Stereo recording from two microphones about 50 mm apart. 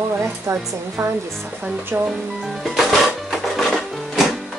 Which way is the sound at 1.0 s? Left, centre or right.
Right.